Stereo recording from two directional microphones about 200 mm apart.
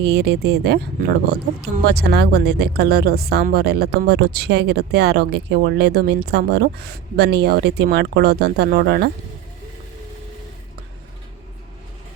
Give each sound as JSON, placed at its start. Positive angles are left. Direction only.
{"t": 0.0, "sound": "speech", "side_deg": -55}